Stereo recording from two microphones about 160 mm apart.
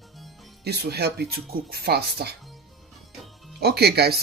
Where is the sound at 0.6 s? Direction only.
90° right.